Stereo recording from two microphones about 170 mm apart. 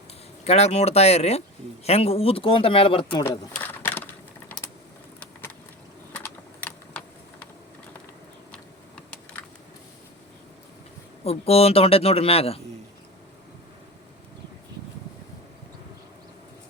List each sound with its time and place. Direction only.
0.4 s speech: 40° left (ahead or behind)
3.2 s a sound: 10° left (ahead or behind)
6.1 s typing: 10° left (ahead or behind)
8.5 s computer keyboard: 5° left (ahead or behind)
11.2 s speech: 35° left (ahead or behind)